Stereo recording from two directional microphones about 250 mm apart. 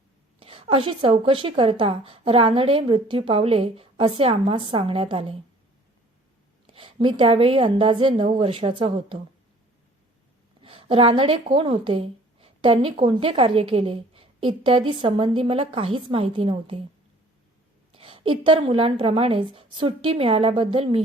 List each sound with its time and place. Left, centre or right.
0.3 s speech: right
6.7 s speech: centre
10.6 s speech: right
17.9 s speech: right